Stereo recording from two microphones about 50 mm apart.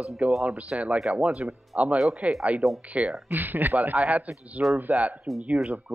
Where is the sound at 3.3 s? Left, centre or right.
Right.